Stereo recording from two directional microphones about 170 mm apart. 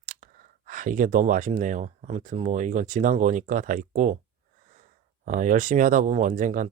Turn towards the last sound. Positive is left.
turn(degrees=-50)  # may be behind; listen again after turning